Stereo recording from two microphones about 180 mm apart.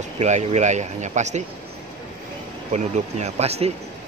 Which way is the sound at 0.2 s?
40° right (ahead or behind).